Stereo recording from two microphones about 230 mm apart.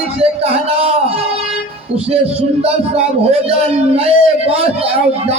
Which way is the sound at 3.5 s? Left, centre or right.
Right.